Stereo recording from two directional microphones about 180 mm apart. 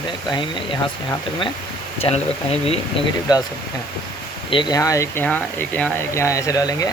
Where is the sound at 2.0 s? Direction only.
30° left (ahead or behind).